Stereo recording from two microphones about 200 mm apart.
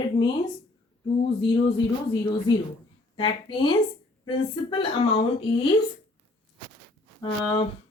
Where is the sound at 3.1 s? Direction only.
25° left (ahead or behind).